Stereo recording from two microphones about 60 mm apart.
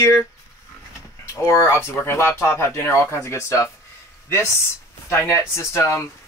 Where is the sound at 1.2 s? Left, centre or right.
Left.